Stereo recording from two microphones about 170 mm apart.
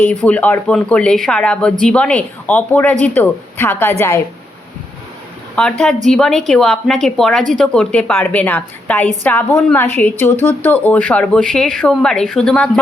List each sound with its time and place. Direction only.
0.0 s a woman's voice: 5° left (ahead or behind)
5.5 s a woman's voice: 5° left (ahead or behind)